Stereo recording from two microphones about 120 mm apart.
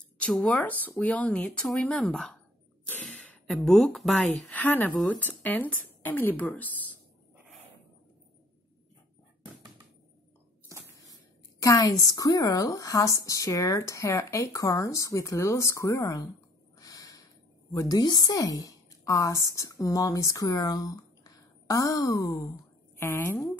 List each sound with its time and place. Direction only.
0.2 s speech: centre (ahead or behind)
0.5 s speech: 15° left (ahead or behind)
4.6 s speech: 15° left (ahead or behind)
11.6 s a woman's voice: 30° left (ahead or behind)
16.8 s snort: 30° left (ahead or behind)
17.7 s a woman's voice: 30° left (ahead or behind)